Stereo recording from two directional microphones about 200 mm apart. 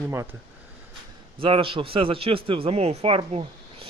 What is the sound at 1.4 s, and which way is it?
A man's voice, 25° right (ahead or behind).